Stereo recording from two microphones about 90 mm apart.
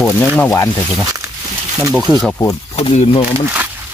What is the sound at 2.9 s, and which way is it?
Speech, 90° left.